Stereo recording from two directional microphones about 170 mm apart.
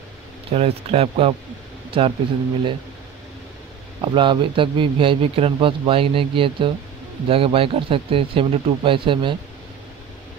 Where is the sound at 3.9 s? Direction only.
30° right (ahead or behind).